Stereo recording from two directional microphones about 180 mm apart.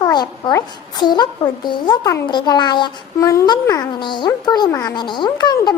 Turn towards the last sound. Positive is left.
turn(degrees=20)  # may be behind; listen again after turning